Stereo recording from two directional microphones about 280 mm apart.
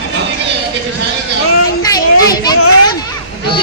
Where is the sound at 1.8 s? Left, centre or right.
Centre.